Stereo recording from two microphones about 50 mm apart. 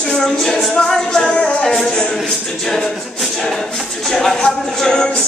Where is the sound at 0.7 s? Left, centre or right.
Centre.